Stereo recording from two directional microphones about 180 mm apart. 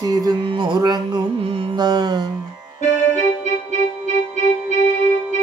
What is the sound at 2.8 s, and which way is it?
Keyboard, 40° left (ahead or behind).